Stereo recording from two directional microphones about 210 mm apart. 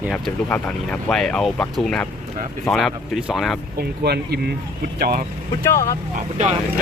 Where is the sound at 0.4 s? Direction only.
10° left (ahead or behind).